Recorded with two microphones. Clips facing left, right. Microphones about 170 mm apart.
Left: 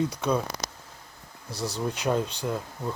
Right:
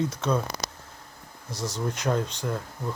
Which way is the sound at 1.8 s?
15° left (ahead or behind).